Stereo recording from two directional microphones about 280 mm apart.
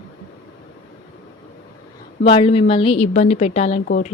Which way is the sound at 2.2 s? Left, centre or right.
Centre.